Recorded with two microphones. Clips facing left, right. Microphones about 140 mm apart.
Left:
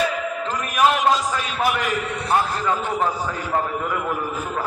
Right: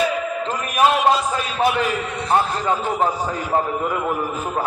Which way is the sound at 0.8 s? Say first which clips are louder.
Right 2 dB; 25° right (ahead or behind).